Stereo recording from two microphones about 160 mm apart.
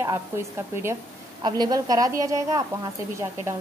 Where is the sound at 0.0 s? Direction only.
15° right (ahead or behind).